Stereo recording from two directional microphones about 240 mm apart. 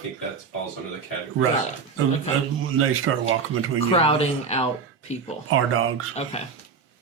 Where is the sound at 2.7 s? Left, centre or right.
Right.